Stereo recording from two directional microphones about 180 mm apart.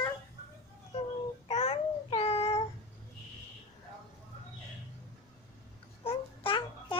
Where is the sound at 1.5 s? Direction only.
35° left (ahead or behind).